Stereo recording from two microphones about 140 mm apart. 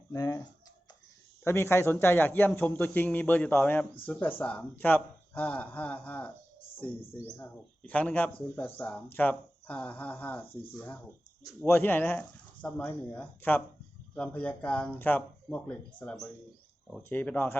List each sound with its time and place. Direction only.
0.1 s speech: 25° left (ahead or behind)
1.5 s speech: 15° left (ahead or behind)